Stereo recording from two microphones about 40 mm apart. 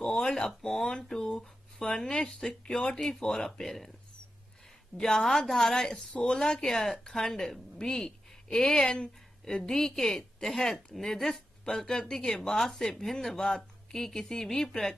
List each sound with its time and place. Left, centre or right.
0.0 s a sound: centre
2.0 s speech: centre
3.0 s speech: centre
5.0 s speech: centre
5.9 s speech: left
6.3 s a woman's voice: centre